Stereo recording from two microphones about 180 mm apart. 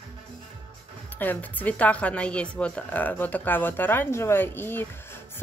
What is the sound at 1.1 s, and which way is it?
Speech, 10° left (ahead or behind).